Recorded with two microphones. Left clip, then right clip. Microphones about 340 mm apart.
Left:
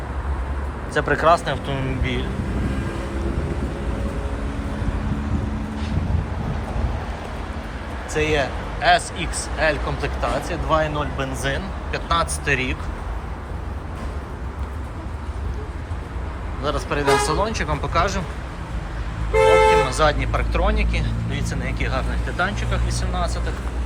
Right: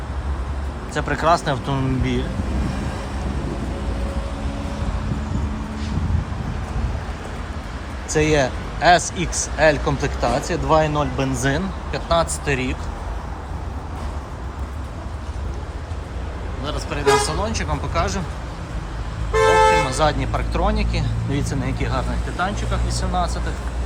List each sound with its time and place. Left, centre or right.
0.9 s speech: centre
8.1 s speech: centre
16.6 s speech: centre
19.3 s vehicle: centre
21.3 s speech: centre